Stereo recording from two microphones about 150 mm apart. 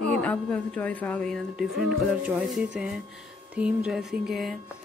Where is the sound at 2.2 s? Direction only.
10° right (ahead or behind).